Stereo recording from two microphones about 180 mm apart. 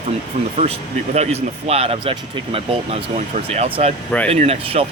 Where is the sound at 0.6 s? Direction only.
40° right (ahead or behind).